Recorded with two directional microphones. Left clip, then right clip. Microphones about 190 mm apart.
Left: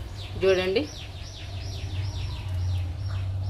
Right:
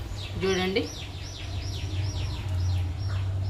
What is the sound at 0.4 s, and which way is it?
Speech, 40° left (ahead or behind).